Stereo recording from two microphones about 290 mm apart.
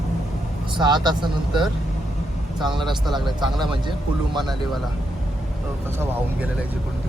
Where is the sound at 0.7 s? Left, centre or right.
Centre.